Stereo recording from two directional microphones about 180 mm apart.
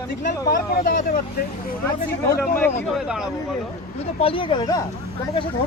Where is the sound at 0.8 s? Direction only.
55° left (ahead or behind).